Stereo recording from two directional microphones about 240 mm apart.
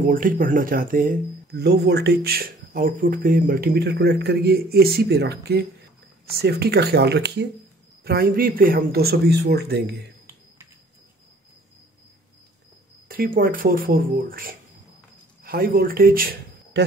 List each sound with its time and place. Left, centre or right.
0.0 s speech: right
13.1 s speech: right